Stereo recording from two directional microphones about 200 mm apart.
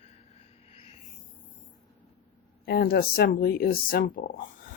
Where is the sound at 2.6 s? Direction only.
50° left (ahead or behind).